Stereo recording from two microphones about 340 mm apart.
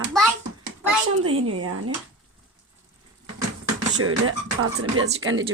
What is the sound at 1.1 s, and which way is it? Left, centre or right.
Speech, right.